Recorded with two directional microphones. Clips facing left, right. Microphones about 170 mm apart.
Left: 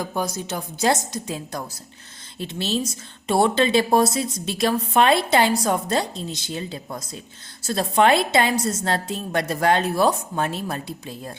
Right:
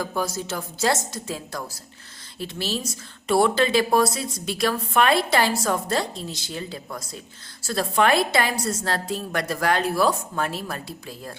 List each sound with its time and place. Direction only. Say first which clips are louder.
0.0 s a woman's voice: even; 20° left (ahead or behind)